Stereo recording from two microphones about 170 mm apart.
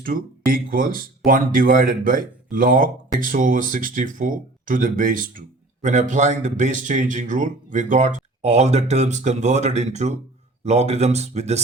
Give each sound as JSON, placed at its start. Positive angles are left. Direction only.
{"t": 0.0, "sound": "speech", "side_deg": -55}